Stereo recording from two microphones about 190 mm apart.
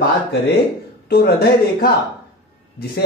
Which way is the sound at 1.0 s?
55° left (ahead or behind).